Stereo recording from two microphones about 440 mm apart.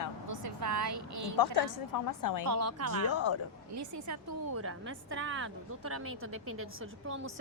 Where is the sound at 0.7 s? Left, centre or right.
Right.